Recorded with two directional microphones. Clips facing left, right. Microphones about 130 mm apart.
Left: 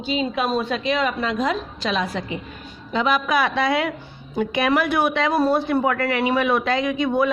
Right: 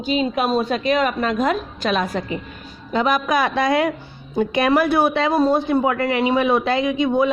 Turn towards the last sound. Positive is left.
turn(degrees=-20)  # may be behind; listen again after turning